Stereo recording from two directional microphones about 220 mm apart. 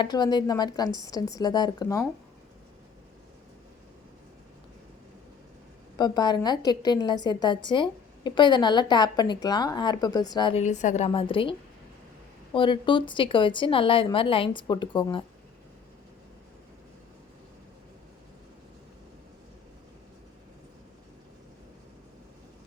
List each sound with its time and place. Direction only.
0.0 s a woman's voice: 20° left (ahead or behind)
6.0 s a woman's voice: 20° left (ahead or behind)
12.5 s a woman's voice: 20° left (ahead or behind)